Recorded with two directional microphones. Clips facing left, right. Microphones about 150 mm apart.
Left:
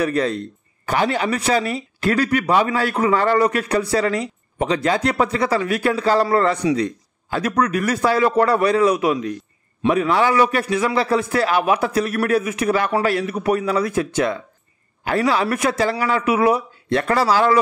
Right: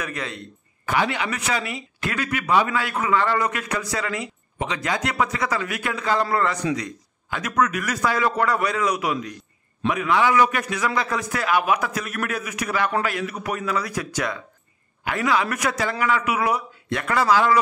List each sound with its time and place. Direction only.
0.0 s a man's voice: 35° left (ahead or behind)